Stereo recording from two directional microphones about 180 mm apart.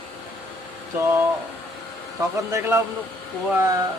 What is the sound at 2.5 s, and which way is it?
Speech, 15° right (ahead or behind).